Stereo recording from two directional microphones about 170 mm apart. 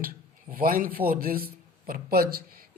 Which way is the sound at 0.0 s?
60° right (ahead or behind).